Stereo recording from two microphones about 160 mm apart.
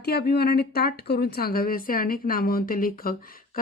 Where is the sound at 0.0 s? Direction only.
75° left (ahead or behind).